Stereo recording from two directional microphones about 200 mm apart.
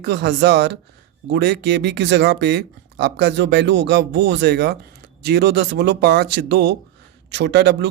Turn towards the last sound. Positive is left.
turn(degrees=-55)  # may be behind; listen again after turning